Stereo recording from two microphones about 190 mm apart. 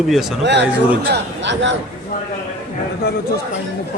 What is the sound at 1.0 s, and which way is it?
Speech, 65° right (ahead or behind).